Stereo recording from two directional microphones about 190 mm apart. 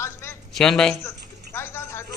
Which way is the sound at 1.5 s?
15° left (ahead or behind).